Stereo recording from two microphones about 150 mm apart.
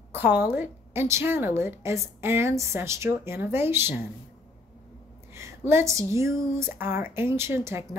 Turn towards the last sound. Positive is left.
turn(degrees=-15)  # may be behind; listen again after turning